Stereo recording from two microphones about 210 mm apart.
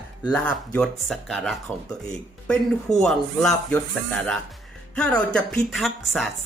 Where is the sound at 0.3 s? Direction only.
5° left (ahead or behind).